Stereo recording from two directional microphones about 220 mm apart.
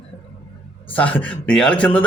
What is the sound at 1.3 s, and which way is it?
Speech, 5° left (ahead or behind).